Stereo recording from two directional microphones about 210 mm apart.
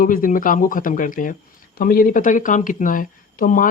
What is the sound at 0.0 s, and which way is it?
Speech, 40° left (ahead or behind).